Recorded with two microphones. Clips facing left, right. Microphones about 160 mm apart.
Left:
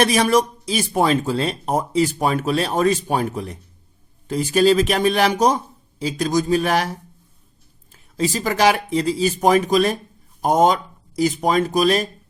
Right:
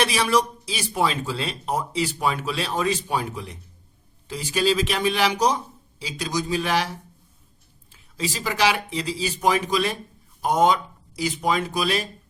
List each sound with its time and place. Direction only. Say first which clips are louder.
0.0 s speech: left 5 dB; 45° left (ahead or behind)
7.9 s speech: left 7 dB; 45° left (ahead or behind)